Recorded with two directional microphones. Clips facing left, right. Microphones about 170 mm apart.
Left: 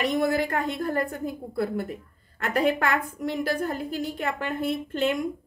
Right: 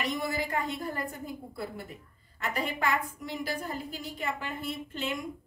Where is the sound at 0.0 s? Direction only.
65° left (ahead or behind).